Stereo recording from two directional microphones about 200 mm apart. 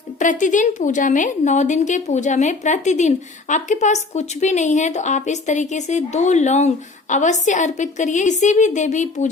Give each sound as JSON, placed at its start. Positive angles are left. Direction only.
{"t": 0.2, "sound": "a woman's voice", "side_deg": 40}